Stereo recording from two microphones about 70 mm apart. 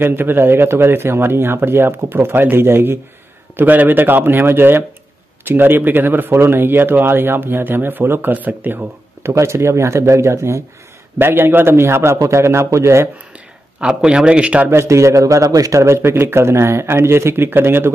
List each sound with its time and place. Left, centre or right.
0.0 s a man's voice: right
3.5 s a man's voice: right
9.2 s a man's voice: right
11.1 s a man's voice: right
13.7 s speech: centre
14.7 s a man's voice: right